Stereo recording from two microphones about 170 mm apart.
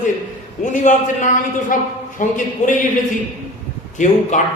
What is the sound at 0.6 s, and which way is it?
A man's voice, 45° left (ahead or behind).